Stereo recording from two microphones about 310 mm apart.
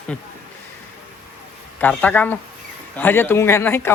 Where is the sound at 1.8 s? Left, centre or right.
Centre.